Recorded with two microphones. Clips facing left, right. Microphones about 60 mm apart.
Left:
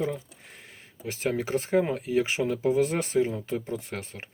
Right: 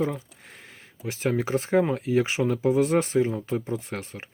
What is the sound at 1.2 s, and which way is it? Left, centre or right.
Speech, right.